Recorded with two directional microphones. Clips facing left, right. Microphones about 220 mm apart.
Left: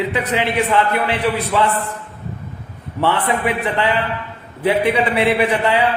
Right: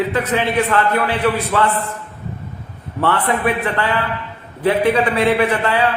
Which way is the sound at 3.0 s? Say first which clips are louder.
Right 1 dB; 15° left (ahead or behind).